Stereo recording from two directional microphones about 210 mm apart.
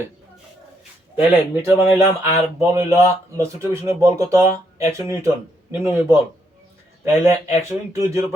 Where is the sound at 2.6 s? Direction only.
15° right (ahead or behind).